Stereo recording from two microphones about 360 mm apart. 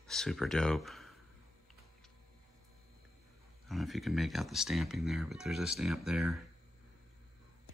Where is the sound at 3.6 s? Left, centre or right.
Centre.